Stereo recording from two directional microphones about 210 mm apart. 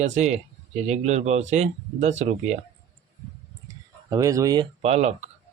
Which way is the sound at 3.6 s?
15° right (ahead or behind).